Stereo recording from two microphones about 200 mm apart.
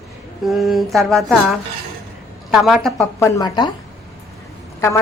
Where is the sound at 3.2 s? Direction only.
20° left (ahead or behind).